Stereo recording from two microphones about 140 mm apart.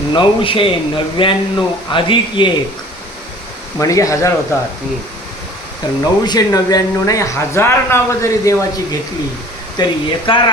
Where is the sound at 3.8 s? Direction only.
25° left (ahead or behind).